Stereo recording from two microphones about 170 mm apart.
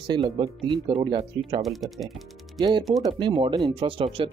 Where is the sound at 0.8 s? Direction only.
30° right (ahead or behind).